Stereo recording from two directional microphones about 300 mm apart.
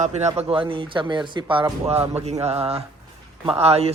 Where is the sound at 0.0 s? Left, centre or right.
Right.